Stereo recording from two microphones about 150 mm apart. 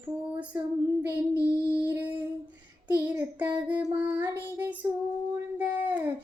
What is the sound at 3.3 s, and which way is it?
Child singing, 10° right (ahead or behind).